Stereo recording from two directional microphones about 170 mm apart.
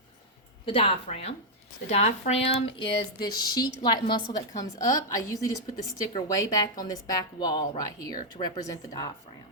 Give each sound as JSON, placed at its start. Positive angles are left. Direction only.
{"t": 0.6, "sound": "a woman's voice", "side_deg": 35}